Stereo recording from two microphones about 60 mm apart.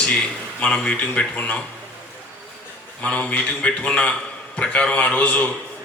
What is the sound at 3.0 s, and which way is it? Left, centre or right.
Speech, left.